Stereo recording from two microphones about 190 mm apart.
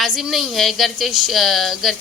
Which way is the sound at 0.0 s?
Centre (ahead or behind).